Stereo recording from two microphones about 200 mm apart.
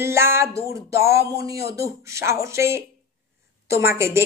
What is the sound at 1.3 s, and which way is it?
A woman's voice, 15° right (ahead or behind).